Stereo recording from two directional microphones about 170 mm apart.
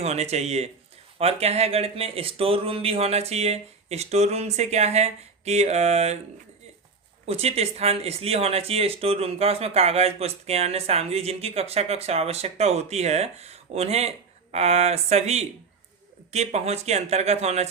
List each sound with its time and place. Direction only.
0.0 s speech: 40° right (ahead or behind)
7.3 s speech: 35° right (ahead or behind)